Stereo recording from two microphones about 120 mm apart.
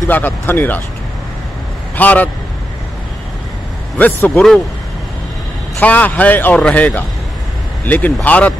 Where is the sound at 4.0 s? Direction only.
15° left (ahead or behind).